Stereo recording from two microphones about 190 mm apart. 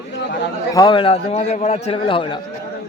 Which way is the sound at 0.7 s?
25° left (ahead or behind).